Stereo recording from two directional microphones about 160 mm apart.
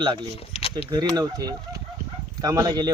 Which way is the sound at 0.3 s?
40° left (ahead or behind).